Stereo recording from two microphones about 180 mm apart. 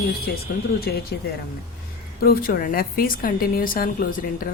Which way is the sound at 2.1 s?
55° left (ahead or behind).